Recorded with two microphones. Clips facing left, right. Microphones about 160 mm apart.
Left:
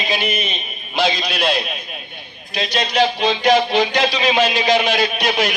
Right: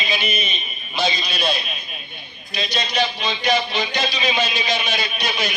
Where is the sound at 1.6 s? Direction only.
85° left.